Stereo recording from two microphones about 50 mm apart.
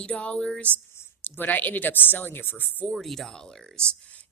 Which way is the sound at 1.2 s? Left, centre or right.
Left.